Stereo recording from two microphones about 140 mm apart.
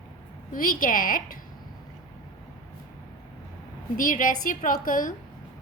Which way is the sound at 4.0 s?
75° left (ahead or behind).